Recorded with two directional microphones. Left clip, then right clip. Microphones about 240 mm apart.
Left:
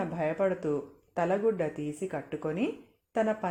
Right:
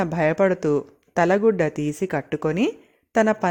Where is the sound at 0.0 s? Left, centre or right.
Right.